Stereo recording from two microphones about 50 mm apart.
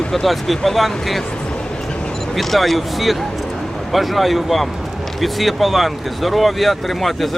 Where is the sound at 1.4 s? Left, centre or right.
Centre.